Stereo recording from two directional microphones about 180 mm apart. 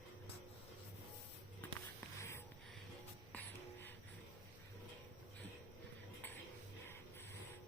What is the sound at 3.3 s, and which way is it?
Music, 5° left (ahead or behind).